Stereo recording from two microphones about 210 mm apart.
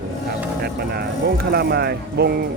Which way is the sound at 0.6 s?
50° right (ahead or behind).